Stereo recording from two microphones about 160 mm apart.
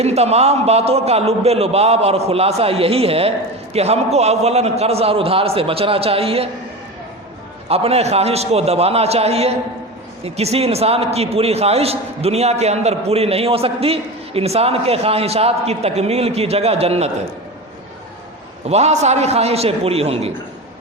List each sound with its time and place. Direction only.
0.0 s a man's voice: 40° right (ahead or behind)
7.7 s a man's voice: 40° right (ahead or behind)
18.7 s a man's voice: 45° right (ahead or behind)